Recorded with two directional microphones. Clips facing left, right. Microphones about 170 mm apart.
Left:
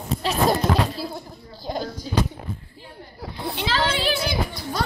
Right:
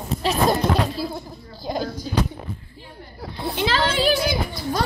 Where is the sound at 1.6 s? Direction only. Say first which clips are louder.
Right 2 dB; 5° right (ahead or behind).